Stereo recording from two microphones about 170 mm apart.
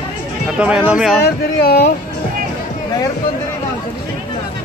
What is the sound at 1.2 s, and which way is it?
Speech, 70° left (ahead or behind).